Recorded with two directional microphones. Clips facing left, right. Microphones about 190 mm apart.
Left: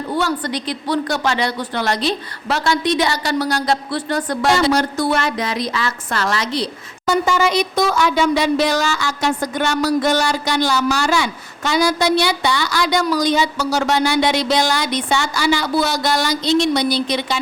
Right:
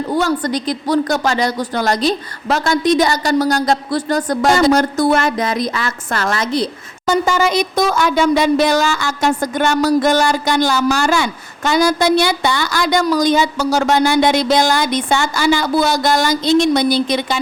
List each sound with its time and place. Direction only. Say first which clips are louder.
0.1 s speech: right 3 dB; 45° right (ahead or behind)